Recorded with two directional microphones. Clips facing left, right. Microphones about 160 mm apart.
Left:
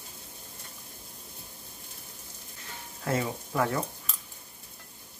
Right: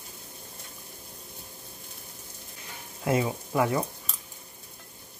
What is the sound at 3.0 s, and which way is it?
Speech, 15° right (ahead or behind).